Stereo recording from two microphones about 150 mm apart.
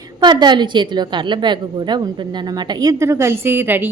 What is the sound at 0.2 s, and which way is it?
A woman's voice, 30° right (ahead or behind).